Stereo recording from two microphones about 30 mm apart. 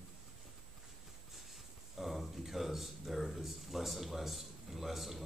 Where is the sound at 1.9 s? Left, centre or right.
Centre.